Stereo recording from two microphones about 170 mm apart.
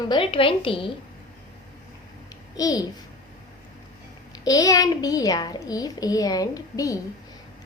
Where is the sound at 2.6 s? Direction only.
20° left (ahead or behind).